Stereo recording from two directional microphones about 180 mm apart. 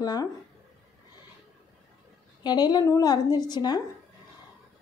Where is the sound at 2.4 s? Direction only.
20° left (ahead or behind).